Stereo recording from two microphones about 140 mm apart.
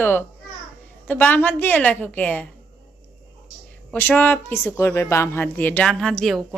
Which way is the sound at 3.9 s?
15° left (ahead or behind).